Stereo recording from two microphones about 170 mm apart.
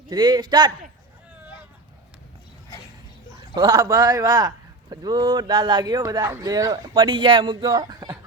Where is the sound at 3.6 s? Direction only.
20° right (ahead or behind).